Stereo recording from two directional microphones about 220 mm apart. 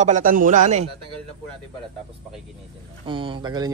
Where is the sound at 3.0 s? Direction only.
25° right (ahead or behind).